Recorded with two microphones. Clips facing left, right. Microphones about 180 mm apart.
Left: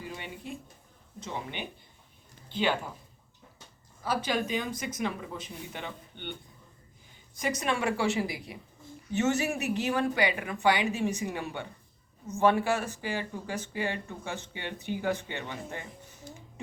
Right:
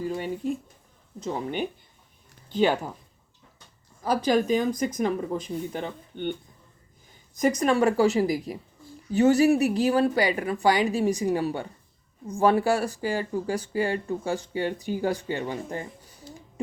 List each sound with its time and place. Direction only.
0.0 s speech: 40° right (ahead or behind)
4.0 s speech: 40° right (ahead or behind)
7.3 s speech: 45° right (ahead or behind)